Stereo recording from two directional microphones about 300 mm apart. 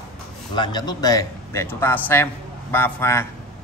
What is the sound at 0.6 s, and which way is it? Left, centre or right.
A man's voice, centre.